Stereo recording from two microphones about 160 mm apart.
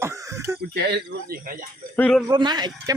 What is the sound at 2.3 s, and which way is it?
Speech, 25° right (ahead or behind).